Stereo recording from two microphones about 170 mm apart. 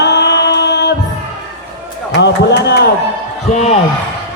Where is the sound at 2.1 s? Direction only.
80° left.